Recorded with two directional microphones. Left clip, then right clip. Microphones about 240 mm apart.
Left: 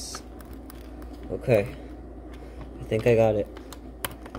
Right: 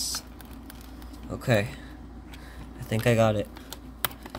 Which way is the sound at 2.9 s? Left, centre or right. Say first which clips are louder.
Left 3 dB; right.